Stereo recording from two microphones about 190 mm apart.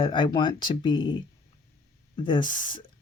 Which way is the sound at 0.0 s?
25° left (ahead or behind).